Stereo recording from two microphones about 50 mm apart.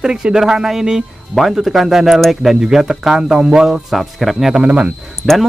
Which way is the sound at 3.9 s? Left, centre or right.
Centre.